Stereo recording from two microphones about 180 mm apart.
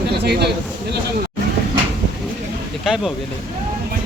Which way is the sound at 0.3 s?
65° right (ahead or behind).